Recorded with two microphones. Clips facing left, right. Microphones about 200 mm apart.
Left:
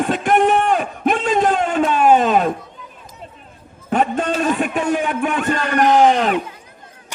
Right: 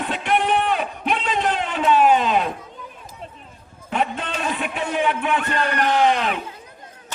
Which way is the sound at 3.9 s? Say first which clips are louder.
Left 6 dB; 45° left (ahead or behind).